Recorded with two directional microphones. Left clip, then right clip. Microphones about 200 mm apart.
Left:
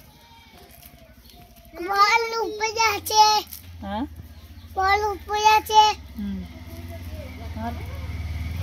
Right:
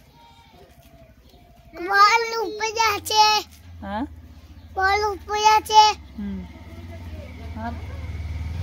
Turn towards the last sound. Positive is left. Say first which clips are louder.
# even
turn(degrees=-5)  # may be behind; listen again after turning